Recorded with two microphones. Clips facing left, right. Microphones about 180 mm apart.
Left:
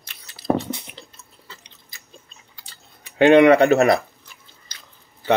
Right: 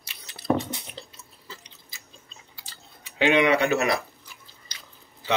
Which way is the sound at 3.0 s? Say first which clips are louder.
Left 9 dB; 55° left (ahead or behind).